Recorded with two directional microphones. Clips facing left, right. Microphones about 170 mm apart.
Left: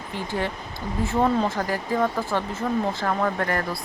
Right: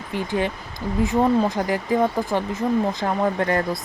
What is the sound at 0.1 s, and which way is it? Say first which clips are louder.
Speech: right 4 dB; 15° right (ahead or behind).